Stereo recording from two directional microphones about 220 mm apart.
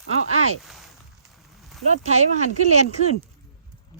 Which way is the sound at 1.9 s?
30° right (ahead or behind).